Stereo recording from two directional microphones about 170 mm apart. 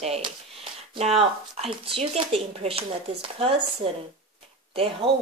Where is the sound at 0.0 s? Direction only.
35° right (ahead or behind).